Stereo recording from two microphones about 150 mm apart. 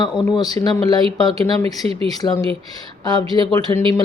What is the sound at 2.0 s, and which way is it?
Speech, 25° left (ahead or behind).